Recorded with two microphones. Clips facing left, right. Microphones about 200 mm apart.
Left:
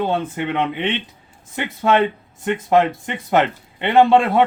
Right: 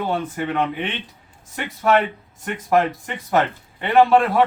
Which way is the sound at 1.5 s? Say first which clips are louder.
Left 1 dB; 25° left (ahead or behind).